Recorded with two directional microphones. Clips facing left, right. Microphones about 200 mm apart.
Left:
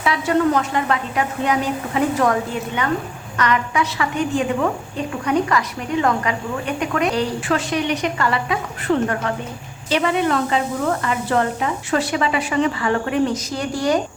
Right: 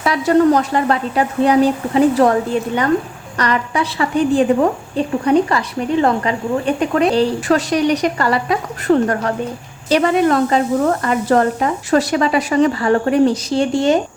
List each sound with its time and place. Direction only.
0.0 s speech: 40° right (ahead or behind)